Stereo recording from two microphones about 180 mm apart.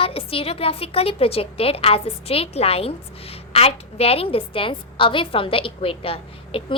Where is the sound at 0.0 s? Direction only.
30° left (ahead or behind).